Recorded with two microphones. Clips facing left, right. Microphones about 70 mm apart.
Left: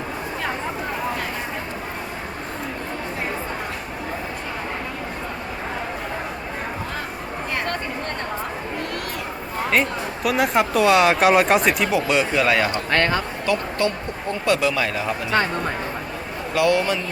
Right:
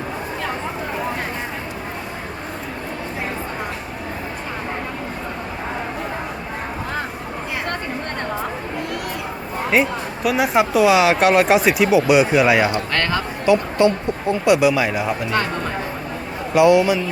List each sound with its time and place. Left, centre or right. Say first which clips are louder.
9.6 s speech: right 3 dB; centre
15.3 s speech: even; left
16.6 s speech: right 6 dB; centre